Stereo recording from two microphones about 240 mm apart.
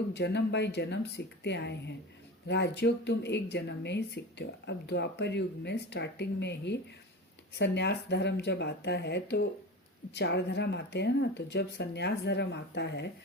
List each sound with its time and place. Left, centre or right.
0.1 s speech: left